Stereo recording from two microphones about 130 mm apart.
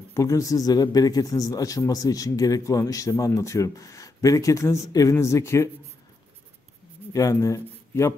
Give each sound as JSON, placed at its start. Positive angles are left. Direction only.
{"t": 0.1, "sound": "speech", "side_deg": 25}
{"t": 7.1, "sound": "speech", "side_deg": 25}